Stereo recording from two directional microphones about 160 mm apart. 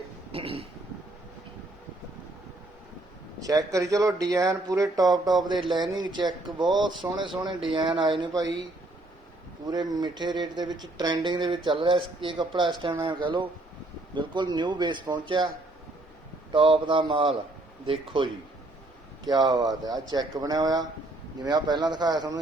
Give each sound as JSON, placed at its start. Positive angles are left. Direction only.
{"t": 0.3, "sound": "a sound", "side_deg": -35}
{"t": 3.4, "sound": "speech", "side_deg": -20}
{"t": 9.6, "sound": "speech", "side_deg": -25}
{"t": 16.5, "sound": "speech", "side_deg": -30}
{"t": 19.3, "sound": "speech", "side_deg": -25}